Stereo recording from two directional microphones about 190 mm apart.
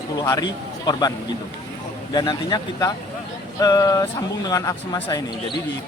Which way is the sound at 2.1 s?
25° left (ahead or behind).